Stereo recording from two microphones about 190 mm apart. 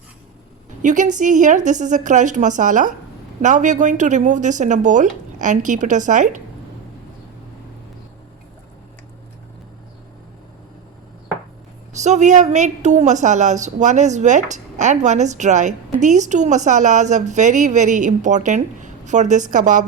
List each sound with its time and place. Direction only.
0.8 s a woman's voice: 40° right (ahead or behind)
11.9 s a woman's voice: 40° right (ahead or behind)